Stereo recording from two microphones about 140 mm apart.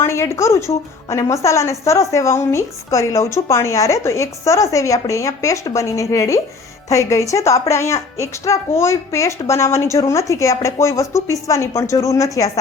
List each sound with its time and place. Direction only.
0.0 s a woman's voice: 20° left (ahead or behind)